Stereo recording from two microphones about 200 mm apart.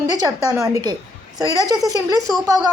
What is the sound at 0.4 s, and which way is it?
A woman's voice, 15° right (ahead or behind).